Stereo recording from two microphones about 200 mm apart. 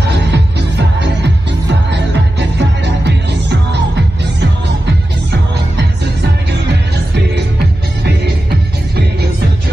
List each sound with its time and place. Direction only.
0.3 s music: 60° right (ahead or behind)